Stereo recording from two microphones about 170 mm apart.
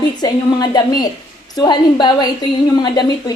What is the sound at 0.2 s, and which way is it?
A woman's voice, 25° left (ahead or behind).